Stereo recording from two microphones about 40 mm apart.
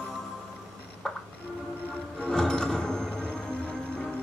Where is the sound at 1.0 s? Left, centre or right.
Centre.